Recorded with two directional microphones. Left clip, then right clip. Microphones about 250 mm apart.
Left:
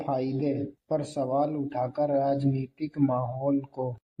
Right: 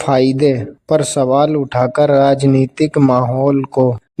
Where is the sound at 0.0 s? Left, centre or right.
Right.